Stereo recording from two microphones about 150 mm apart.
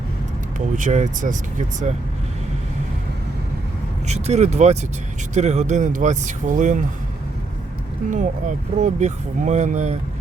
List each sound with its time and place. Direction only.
0.8 s speech: 55° right (ahead or behind)
4.0 s speech: 50° right (ahead or behind)
8.1 s speech: 55° right (ahead or behind)